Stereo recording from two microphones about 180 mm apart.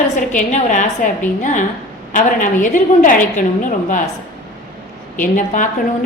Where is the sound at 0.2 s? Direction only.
45° left (ahead or behind).